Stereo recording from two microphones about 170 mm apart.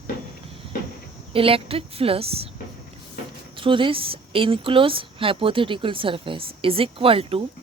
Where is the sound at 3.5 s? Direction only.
30° right (ahead or behind).